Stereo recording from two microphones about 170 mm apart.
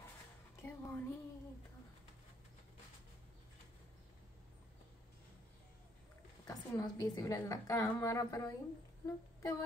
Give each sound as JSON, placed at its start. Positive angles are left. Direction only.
{"t": 0.6, "sound": "music", "side_deg": 15}
{"t": 6.4, "sound": "a woman's voice", "side_deg": 20}
{"t": 9.0, "sound": "a sound", "side_deg": 20}